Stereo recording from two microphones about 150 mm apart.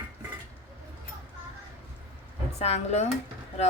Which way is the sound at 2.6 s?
45° left (ahead or behind).